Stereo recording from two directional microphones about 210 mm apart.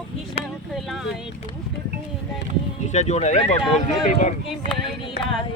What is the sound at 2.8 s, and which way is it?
Speech, 30° left (ahead or behind).